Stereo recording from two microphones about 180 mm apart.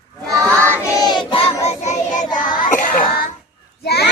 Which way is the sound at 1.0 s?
20° left (ahead or behind).